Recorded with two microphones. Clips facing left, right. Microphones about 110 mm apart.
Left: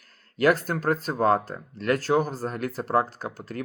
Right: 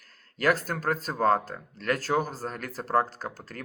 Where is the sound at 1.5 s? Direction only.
40° left (ahead or behind).